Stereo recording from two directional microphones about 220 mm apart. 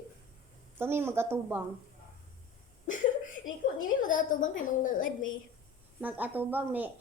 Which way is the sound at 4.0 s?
35° left (ahead or behind).